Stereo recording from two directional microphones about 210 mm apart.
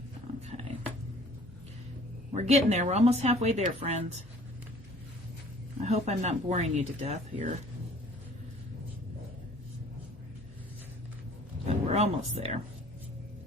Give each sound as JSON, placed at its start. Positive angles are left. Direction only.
{"t": 2.3, "sound": "speech", "side_deg": -30}
{"t": 5.8, "sound": "speech", "side_deg": -30}
{"t": 11.6, "sound": "a sound", "side_deg": -30}